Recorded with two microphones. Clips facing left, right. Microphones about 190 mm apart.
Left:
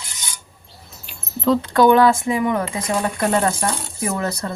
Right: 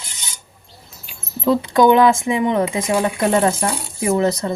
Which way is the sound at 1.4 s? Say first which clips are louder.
Right 1 dB; 15° right (ahead or behind).